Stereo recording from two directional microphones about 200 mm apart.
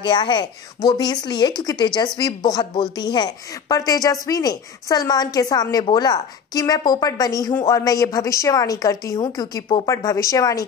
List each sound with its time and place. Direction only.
0.0 s a woman's voice: 25° left (ahead or behind)